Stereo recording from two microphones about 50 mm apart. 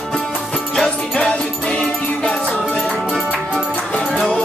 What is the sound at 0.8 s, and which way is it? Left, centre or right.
Music, centre.